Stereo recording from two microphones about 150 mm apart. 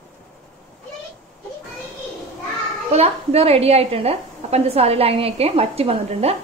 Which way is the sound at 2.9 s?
45° right (ahead or behind).